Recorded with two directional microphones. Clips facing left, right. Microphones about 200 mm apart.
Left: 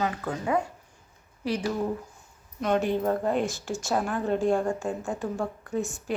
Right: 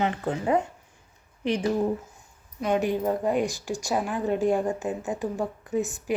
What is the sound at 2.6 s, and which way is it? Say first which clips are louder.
A woman's voice: even; 10° right (ahead or behind).